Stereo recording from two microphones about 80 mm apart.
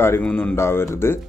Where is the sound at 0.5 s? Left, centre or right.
Left.